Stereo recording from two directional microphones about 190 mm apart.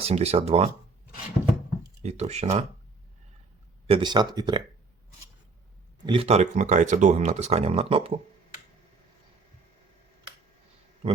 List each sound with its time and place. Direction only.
0.0 s speech: 35° right (ahead or behind)
2.0 s speech: 35° right (ahead or behind)
3.8 s speech: 25° right (ahead or behind)
6.1 s speech: 30° right (ahead or behind)